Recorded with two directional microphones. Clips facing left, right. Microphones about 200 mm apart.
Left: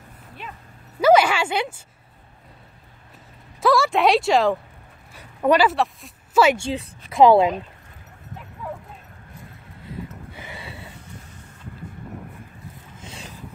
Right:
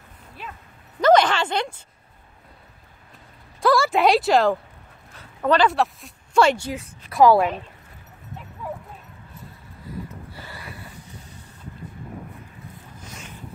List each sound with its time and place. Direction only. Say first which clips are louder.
1.0 s a sound: left 1 dB; 10° left (ahead or behind)
3.6 s a woman's voice: even; centre (ahead or behind)
5.1 s dog: left 2 dB; 15° left (ahead or behind)
5.7 s speech: even; centre (ahead or behind)
6.6 s a woman's voice: left 4 dB; 25° left (ahead or behind)